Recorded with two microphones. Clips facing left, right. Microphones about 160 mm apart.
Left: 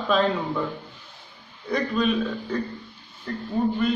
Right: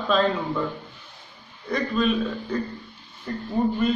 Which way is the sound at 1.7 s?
Centre (ahead or behind).